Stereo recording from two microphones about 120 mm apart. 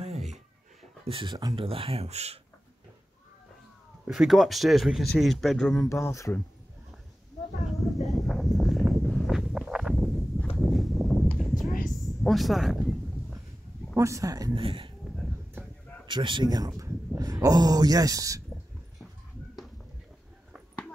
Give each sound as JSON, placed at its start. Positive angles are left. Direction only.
{"t": 0.0, "sound": "a sound", "side_deg": -65}
{"t": 1.0, "sound": "speech", "side_deg": -45}
{"t": 4.1, "sound": "speech", "side_deg": 0}
{"t": 5.8, "sound": "speech", "side_deg": 25}
{"t": 8.1, "sound": "a sound", "side_deg": 0}
{"t": 13.9, "sound": "speech", "side_deg": -25}
{"t": 14.5, "sound": "speech", "side_deg": -45}
{"t": 15.6, "sound": "a sound", "side_deg": -20}
{"t": 16.1, "sound": "speech", "side_deg": -40}